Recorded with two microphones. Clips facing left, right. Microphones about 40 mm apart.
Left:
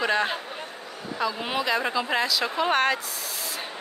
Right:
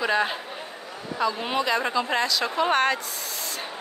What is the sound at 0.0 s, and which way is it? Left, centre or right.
Speech, centre.